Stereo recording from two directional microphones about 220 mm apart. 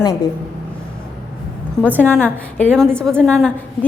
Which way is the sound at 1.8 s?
10° right (ahead or behind).